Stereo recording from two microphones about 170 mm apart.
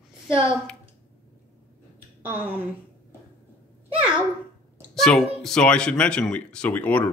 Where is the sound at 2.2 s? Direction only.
10° right (ahead or behind).